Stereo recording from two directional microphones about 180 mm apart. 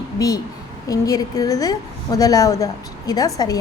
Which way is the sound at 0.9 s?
20° left (ahead or behind).